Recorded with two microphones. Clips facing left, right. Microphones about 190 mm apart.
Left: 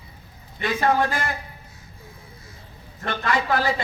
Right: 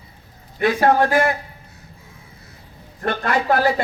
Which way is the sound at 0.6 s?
60° right (ahead or behind).